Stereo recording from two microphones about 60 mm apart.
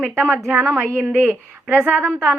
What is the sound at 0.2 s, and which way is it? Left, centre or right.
A woman's voice, right.